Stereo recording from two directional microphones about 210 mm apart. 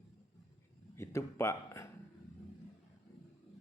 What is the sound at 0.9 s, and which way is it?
Speech, 15° left (ahead or behind).